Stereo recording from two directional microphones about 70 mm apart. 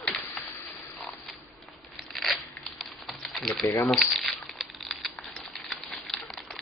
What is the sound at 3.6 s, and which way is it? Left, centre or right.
Speech, left.